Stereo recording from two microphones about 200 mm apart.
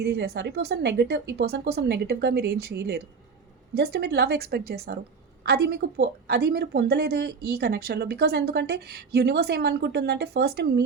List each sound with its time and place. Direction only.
0.0 s a woman's voice: 55° right (ahead or behind)